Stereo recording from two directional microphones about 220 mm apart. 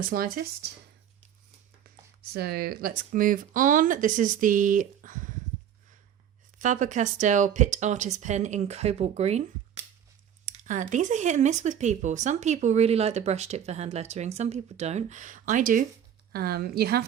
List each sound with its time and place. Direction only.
0.0 s speech: 40° right (ahead or behind)
2.3 s speech: 45° right (ahead or behind)
6.6 s a woman's voice: 35° right (ahead or behind)